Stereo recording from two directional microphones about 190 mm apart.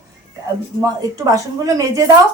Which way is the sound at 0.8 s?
20° right (ahead or behind).